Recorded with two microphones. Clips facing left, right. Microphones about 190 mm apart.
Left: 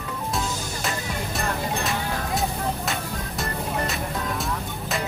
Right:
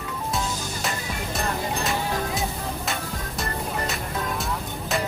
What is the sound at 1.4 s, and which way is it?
Music, centre (ahead or behind).